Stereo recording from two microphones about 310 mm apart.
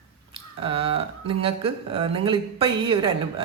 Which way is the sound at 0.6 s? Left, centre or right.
Centre.